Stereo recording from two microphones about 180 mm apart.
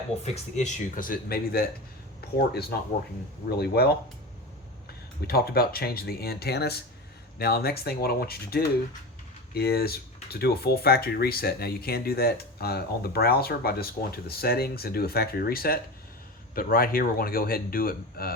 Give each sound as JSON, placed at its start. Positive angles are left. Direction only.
{"t": 0.5, "sound": "speech", "side_deg": 45}
{"t": 5.2, "sound": "speech", "side_deg": 60}